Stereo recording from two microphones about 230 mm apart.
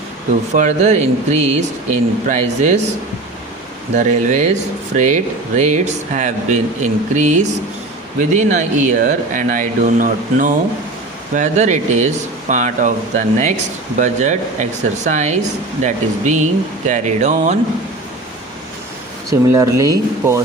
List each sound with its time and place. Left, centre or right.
0.5 s speech: right
3.9 s speech: right
19.3 s speech: centre